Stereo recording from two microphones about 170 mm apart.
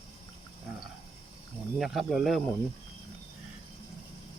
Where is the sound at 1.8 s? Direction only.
Centre (ahead or behind).